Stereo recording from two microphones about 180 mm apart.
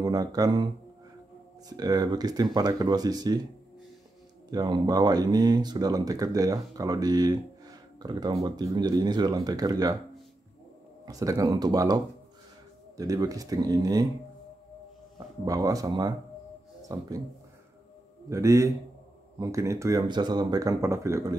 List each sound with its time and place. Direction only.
0.0 s speech: 20° right (ahead or behind)
1.7 s speech: 20° right (ahead or behind)
4.5 s speech: 20° right (ahead or behind)
11.1 s speech: 20° right (ahead or behind)
15.1 s speech: 20° right (ahead or behind)
18.3 s a man's voice: 15° right (ahead or behind)